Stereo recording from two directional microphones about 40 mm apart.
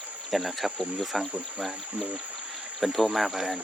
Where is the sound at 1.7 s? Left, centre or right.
Right.